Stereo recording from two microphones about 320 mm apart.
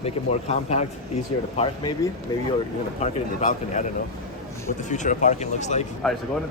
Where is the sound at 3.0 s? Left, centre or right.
Left.